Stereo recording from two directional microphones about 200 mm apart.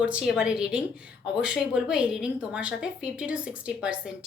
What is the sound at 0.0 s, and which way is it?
Speech, 5° right (ahead or behind).